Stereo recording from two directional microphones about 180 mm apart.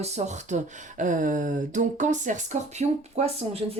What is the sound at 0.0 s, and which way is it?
Speech, 40° right (ahead or behind).